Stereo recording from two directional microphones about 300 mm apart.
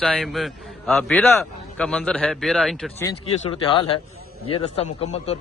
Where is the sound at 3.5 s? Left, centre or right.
Centre.